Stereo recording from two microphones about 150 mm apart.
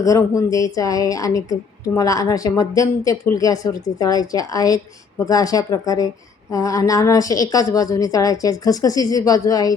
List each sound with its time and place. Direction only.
0.0 s a woman's voice: 20° left (ahead or behind)